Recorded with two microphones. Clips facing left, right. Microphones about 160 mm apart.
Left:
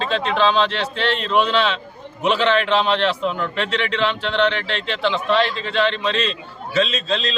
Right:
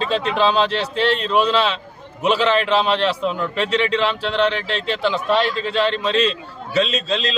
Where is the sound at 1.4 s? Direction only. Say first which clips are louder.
Even; 35° right (ahead or behind).